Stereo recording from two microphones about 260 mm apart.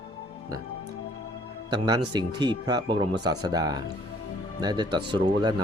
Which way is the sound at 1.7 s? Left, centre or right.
Centre.